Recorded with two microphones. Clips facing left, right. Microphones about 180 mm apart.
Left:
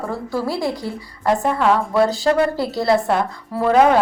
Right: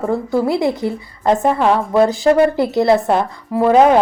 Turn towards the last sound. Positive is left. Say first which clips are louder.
# right 3 dB
turn(degrees=-20)  # may be behind; listen again after turning